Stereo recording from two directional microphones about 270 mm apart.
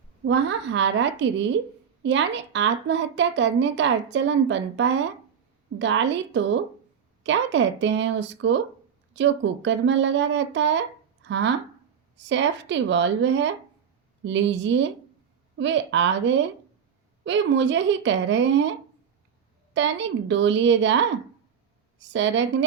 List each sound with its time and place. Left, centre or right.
0.3 s a woman's voice: right
19.7 s a woman's voice: right